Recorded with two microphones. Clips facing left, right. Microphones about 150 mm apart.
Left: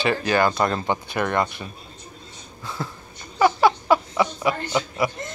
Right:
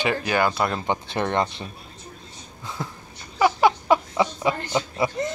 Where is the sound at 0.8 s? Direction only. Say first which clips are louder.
Left 1 dB; 25° right (ahead or behind).